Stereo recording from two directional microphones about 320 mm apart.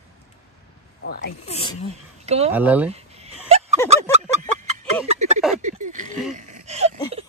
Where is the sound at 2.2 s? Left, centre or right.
Centre.